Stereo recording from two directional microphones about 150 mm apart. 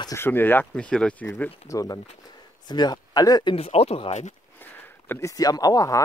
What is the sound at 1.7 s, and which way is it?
Speech, 25° left (ahead or behind).